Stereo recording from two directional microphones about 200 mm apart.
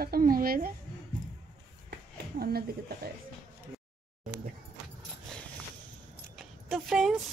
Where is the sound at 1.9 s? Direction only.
50° right (ahead or behind).